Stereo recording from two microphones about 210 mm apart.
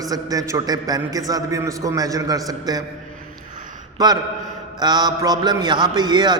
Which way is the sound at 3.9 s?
20° right (ahead or behind).